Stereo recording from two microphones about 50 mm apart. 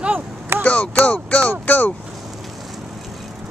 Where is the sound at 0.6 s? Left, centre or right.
Left.